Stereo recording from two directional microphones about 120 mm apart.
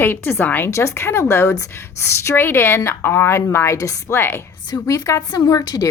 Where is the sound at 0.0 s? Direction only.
20° left (ahead or behind).